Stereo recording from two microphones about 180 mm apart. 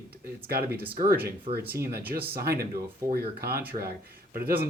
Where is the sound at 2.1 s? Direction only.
55° right (ahead or behind).